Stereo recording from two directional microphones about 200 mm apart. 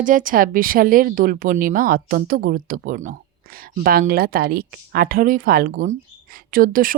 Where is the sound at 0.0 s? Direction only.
40° right (ahead or behind).